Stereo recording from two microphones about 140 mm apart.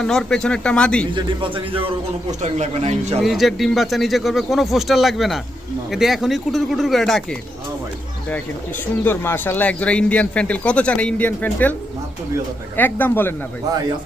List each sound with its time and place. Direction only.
0.0 s speech: 5° left (ahead or behind)
1.1 s speech: 35° right (ahead or behind)
2.4 s speech: 55° right (ahead or behind)
3.2 s speech: centre (ahead or behind)
9.0 s speech: 15° left (ahead or behind)
12.7 s speech: 15° left (ahead or behind)